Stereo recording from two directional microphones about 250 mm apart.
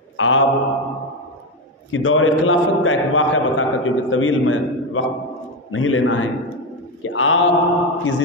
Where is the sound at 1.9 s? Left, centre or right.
Left.